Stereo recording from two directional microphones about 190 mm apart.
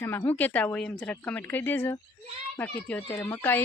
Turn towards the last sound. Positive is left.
turn(degrees=10)  # may be behind; listen again after turning